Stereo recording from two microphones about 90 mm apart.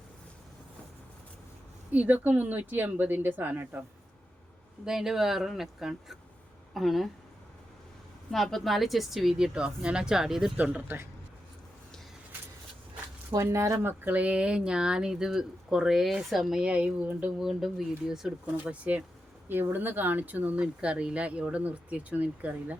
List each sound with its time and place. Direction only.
1.9 s speech: 20° right (ahead or behind)
4.9 s speech: 5° right (ahead or behind)
8.3 s speech: centre (ahead or behind)
10.6 s speech: 15° right (ahead or behind)
13.3 s speech: 35° right (ahead or behind); by 17.3 s 20° right (ahead or behind)
17.4 s speech: 5° right (ahead or behind)